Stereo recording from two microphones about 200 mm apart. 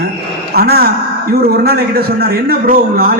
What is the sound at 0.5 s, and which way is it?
A man's voice, 50° right (ahead or behind).